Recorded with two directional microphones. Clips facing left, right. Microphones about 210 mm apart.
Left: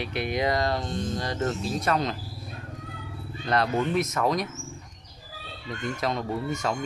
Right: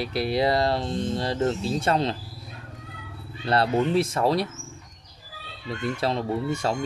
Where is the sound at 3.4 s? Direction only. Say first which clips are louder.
Right 3 dB; 30° right (ahead or behind).